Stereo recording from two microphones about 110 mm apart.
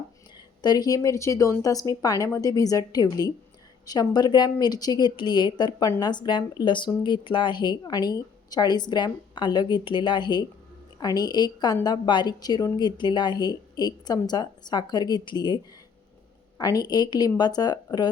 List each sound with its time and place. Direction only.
0.6 s a woman's voice: 40° left (ahead or behind)